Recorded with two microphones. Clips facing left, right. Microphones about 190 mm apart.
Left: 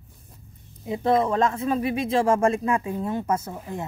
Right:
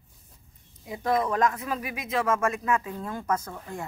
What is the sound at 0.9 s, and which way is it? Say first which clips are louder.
Speech: left 5 dB; 25° left (ahead or behind).